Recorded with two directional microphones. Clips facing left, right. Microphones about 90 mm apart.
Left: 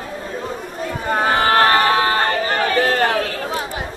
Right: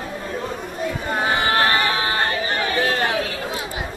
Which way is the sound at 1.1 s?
40° left (ahead or behind).